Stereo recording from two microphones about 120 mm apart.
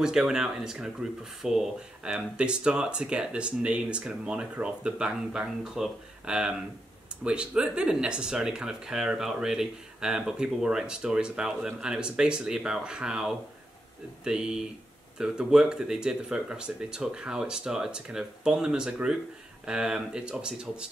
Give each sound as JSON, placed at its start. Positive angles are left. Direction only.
{"t": 0.0, "sound": "speech", "side_deg": -5}